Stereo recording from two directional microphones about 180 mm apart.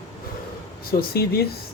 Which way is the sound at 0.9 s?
60° left (ahead or behind).